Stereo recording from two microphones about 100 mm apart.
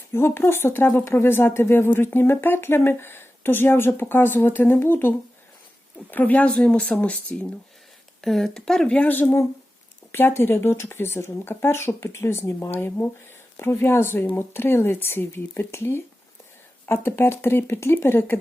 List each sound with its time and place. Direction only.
0.1 s speech: 25° left (ahead or behind)